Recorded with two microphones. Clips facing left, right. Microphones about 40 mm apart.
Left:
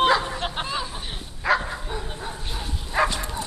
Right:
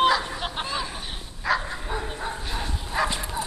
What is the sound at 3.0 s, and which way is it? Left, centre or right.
Bow-wow, centre.